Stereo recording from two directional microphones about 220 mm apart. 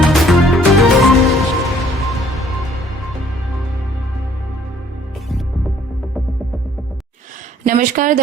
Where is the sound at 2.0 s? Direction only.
Centre (ahead or behind).